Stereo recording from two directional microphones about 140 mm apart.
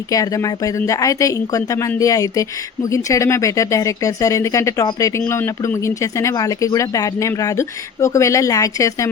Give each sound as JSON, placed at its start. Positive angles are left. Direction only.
{"t": 0.1, "sound": "speech", "side_deg": 25}